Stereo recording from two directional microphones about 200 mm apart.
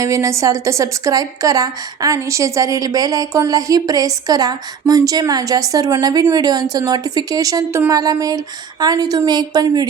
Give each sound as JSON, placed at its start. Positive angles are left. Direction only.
{"t": 0.0, "sound": "a woman's voice", "side_deg": -15}